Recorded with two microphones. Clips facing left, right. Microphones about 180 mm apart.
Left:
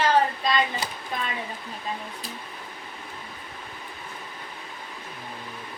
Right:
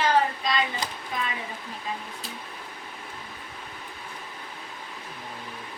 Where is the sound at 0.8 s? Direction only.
10° left (ahead or behind).